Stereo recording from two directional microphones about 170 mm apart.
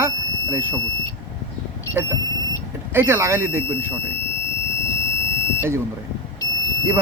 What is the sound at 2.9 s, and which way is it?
Speech, 15° right (ahead or behind).